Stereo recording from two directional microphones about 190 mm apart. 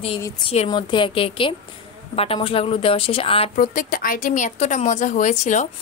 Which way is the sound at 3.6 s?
45° left (ahead or behind).